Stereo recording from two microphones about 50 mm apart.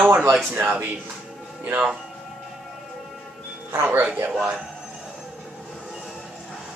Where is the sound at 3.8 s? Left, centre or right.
Right.